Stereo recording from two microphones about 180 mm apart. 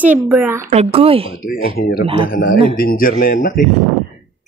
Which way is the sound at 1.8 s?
55° left (ahead or behind).